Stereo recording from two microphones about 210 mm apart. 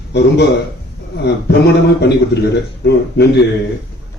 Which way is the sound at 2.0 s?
50° left (ahead or behind).